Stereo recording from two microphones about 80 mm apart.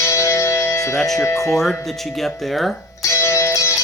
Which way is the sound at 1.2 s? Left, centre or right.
Left.